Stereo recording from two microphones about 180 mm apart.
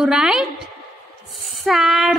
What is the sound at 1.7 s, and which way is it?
Speech, centre (ahead or behind).